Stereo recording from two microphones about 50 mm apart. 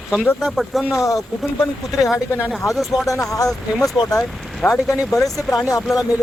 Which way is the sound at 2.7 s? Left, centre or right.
Centre.